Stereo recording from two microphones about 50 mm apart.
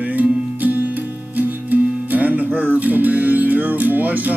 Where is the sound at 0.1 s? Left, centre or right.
Right.